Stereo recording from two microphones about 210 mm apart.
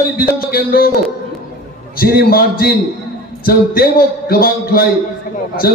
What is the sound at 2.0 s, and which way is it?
A man's voice, 45° left (ahead or behind).